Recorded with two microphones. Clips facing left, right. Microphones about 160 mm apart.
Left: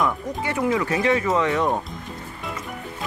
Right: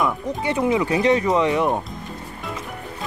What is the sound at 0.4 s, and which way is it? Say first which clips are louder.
Speech: right 3 dB; 20° right (ahead or behind).